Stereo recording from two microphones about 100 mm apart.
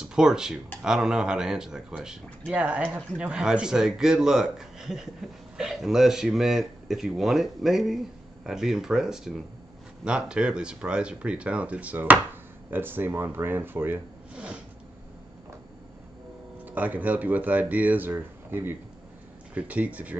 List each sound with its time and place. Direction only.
0.0 s speech: 5° right (ahead or behind)
16.6 s speech: 15° right (ahead or behind)